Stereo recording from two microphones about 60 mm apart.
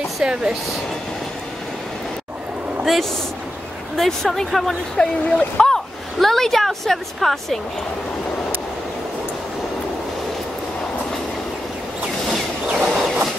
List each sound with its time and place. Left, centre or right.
0.2 s speech: centre
2.8 s a woman's voice: centre
12.3 s vehicle: centre